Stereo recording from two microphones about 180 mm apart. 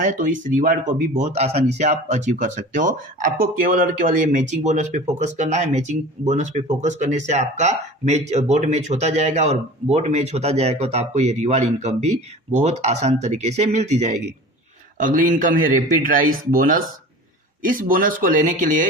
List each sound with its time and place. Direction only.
0.0 s speech: 45° right (ahead or behind)